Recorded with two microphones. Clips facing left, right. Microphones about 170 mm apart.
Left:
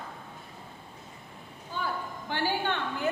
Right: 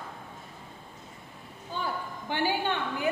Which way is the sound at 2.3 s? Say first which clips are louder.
Right 1 dB; 15° right (ahead or behind).